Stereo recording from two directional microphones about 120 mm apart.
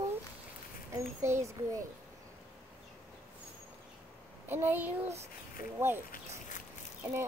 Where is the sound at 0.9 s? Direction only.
25° right (ahead or behind).